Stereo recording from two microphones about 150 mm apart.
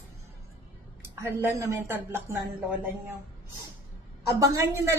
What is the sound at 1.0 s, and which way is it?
A woman's voice, 15° right (ahead or behind).